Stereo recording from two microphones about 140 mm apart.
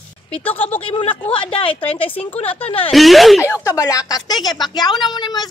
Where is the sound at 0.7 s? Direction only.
40° left (ahead or behind).